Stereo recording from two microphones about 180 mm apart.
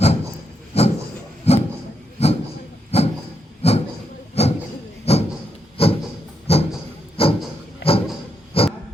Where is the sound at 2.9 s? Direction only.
35° left (ahead or behind).